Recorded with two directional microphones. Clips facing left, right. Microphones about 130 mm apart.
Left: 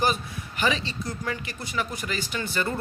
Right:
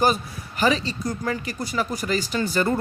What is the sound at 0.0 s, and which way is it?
A woman's voice, 40° right (ahead or behind).